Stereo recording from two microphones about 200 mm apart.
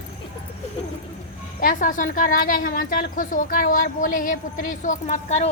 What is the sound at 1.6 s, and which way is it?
A woman's voice, 40° left (ahead or behind).